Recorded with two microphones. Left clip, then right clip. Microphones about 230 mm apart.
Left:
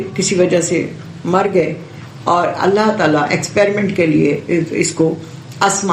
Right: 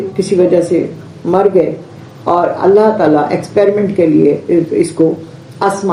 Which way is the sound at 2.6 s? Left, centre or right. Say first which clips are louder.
Right 5 dB; left.